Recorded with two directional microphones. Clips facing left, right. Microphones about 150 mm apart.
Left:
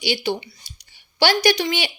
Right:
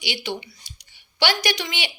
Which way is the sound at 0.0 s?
35° left (ahead or behind).